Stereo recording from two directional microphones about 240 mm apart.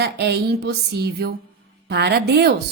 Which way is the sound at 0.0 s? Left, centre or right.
Right.